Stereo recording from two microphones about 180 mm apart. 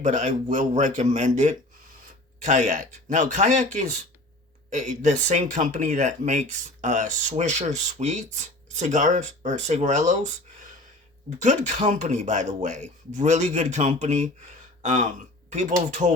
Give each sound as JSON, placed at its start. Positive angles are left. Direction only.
{"t": 0.0, "sound": "speech", "side_deg": -40}